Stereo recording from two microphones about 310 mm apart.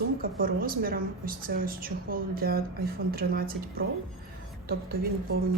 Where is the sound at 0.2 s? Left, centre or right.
Right.